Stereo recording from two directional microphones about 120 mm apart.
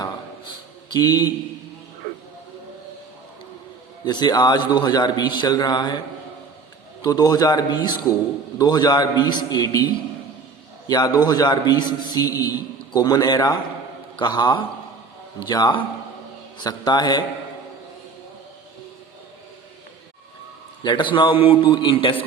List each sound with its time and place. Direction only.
0.9 s a man's voice: 35° left (ahead or behind)
4.0 s a man's voice: 35° left (ahead or behind)
7.0 s a man's voice: 35° left (ahead or behind)
20.8 s a man's voice: 40° left (ahead or behind)